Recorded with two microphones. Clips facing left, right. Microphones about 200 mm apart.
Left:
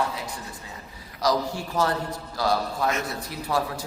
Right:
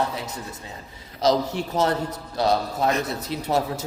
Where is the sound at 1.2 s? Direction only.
20° right (ahead or behind).